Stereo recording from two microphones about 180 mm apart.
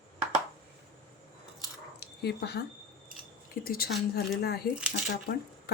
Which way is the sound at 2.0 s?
65° left (ahead or behind).